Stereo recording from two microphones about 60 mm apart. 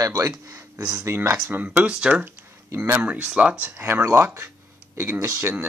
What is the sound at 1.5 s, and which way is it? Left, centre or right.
Speech, right.